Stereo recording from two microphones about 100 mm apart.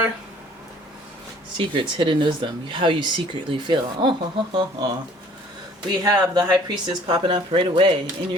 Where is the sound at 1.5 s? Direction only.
55° right (ahead or behind).